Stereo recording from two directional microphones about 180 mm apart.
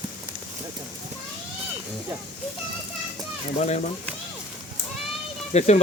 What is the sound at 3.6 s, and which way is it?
Speech, 40° left (ahead or behind).